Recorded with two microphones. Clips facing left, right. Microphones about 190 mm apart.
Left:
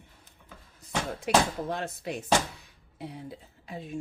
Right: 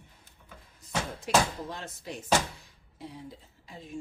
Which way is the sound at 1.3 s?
65° left (ahead or behind).